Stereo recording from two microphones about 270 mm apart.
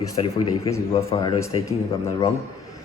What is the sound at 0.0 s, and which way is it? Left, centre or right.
A man's voice, centre.